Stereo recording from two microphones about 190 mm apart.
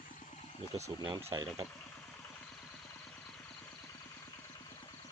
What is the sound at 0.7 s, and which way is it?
Speech, 30° right (ahead or behind).